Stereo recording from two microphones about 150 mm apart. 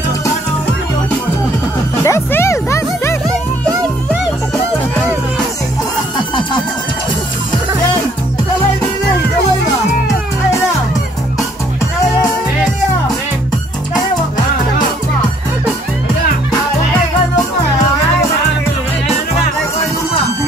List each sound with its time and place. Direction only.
2.0 s music: 20° left (ahead or behind)
6.1 s music: 30° left (ahead or behind)